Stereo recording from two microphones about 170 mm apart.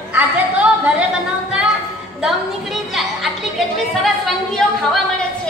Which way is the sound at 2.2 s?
Centre (ahead or behind).